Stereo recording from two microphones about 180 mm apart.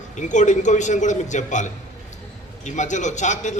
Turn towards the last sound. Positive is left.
turn(degrees=40)  # may be behind; listen again after turning